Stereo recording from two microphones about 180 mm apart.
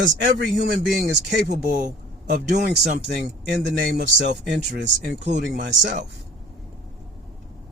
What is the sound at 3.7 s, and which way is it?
Speech, 65° right (ahead or behind).